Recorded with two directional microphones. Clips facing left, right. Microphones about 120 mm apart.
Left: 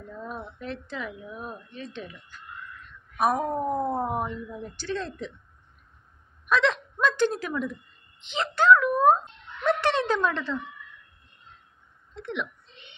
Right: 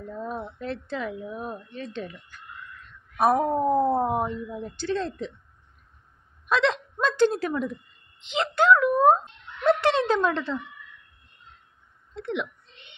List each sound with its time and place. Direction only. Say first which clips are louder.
0.1 s speech: right 4 dB; 30° right (ahead or behind)
1.8 s speech: right 4 dB; 40° right (ahead or behind)
3.2 s speech: right 3 dB; 25° right (ahead or behind)
6.5 s a woman's voice: even; 25° right (ahead or behind)
12.2 s a woman's voice: right 3 dB; 25° right (ahead or behind)